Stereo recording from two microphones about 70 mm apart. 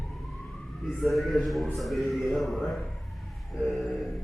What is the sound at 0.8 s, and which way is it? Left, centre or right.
A man's voice, centre.